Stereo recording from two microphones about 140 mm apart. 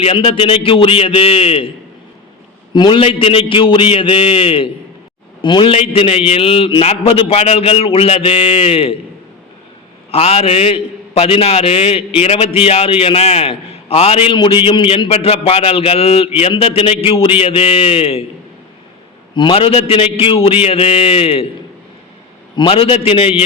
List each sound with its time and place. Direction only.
0.0 s a man's voice: 40° left (ahead or behind)
2.7 s a man's voice: 35° left (ahead or behind)
10.1 s a man's voice: 45° left (ahead or behind)
19.3 s a man's voice: 35° left (ahead or behind)
22.5 s a man's voice: 40° left (ahead or behind)